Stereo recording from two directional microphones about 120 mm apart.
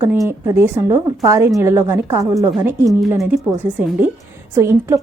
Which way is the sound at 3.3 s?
15° right (ahead or behind).